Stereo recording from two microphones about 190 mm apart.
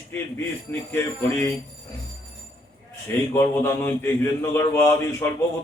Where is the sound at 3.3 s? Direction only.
15° left (ahead or behind).